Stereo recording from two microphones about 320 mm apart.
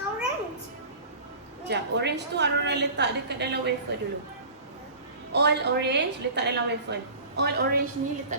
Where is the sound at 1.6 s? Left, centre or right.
Right.